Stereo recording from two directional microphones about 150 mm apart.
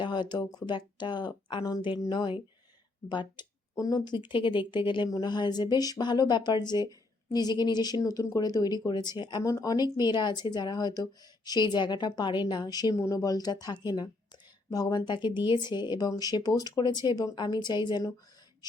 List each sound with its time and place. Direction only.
0.0 s speech: 30° left (ahead or behind)